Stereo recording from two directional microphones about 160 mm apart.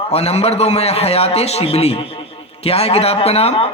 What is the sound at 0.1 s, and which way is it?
A man's voice, 40° left (ahead or behind).